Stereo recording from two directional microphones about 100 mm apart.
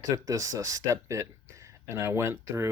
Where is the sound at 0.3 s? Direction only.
35° right (ahead or behind).